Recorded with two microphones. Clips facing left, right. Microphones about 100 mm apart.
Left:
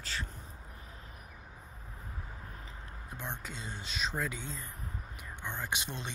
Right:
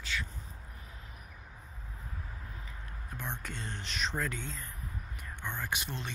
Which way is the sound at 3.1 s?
15° left (ahead or behind).